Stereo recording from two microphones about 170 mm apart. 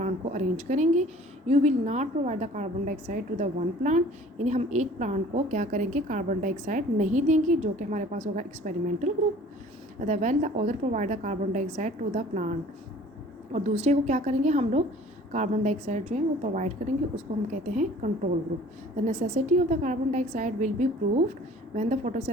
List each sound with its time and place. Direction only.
0.0 s a woman's voice: 45° right (ahead or behind)